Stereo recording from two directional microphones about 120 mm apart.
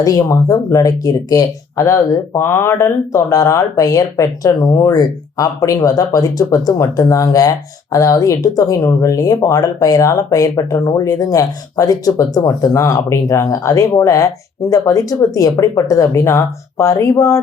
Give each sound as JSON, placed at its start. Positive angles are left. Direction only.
{"t": 0.0, "sound": "speech", "side_deg": 30}